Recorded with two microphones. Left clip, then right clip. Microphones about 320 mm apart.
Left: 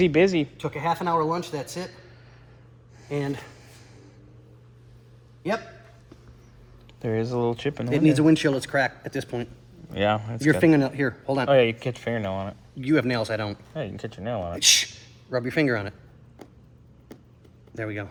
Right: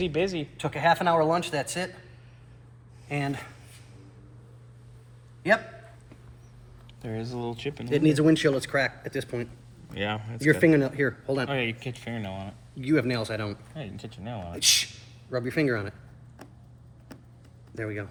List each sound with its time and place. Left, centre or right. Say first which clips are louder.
0.0 s speech: left 8 dB; left
0.6 s a man's voice: right 3 dB; centre
3.1 s a man's voice: left 2 dB; centre
7.0 s speech: left 9 dB; left
7.4 s speech: left 7 dB; left
17.7 s speech: left 2 dB; left